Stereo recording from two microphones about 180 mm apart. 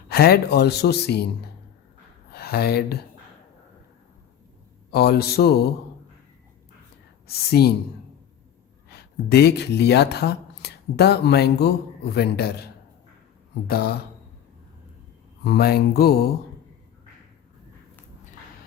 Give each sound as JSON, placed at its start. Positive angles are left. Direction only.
{"t": 0.1, "sound": "speech", "side_deg": 60}
{"t": 2.3, "sound": "speech", "side_deg": 60}
{"t": 4.9, "sound": "speech", "side_deg": 60}
{"t": 7.3, "sound": "speech", "side_deg": 60}
{"t": 8.9, "sound": "speech", "side_deg": 60}
{"t": 13.7, "sound": "speech", "side_deg": 60}
{"t": 15.4, "sound": "speech", "side_deg": 60}